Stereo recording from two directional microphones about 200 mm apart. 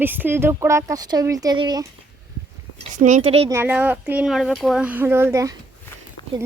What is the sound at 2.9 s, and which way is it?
Speech, 40° right (ahead or behind).